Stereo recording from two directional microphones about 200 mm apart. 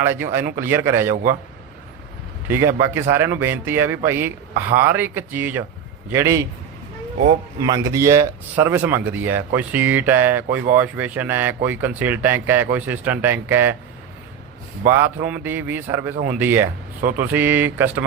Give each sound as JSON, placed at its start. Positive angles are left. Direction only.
{"t": 0.0, "sound": "speech", "side_deg": -10}
{"t": 1.1, "sound": "a man's voice", "side_deg": -45}
{"t": 2.5, "sound": "speech", "side_deg": -10}
{"t": 7.6, "sound": "speech", "side_deg": -15}
{"t": 14.8, "sound": "speech", "side_deg": -10}